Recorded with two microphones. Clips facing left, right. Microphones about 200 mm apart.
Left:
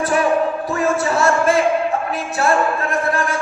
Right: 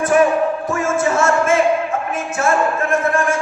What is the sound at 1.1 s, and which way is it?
Speech, 35° left (ahead or behind).